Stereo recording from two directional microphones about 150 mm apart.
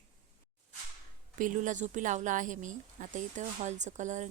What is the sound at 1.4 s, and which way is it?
Speech, 60° right (ahead or behind).